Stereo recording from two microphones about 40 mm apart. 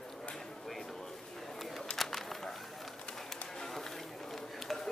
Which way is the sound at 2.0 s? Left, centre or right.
Centre.